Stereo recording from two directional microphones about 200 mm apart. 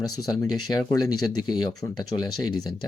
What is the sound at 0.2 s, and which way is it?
Speech, 20° left (ahead or behind).